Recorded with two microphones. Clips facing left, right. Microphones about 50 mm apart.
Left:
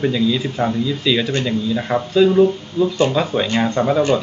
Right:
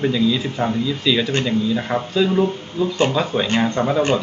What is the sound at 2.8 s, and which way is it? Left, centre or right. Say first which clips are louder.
Speech: left 3 dB; right.